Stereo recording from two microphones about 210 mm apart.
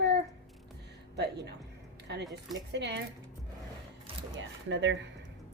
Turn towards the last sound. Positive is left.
turn(degrees=-60)  # may be behind; listen again after turning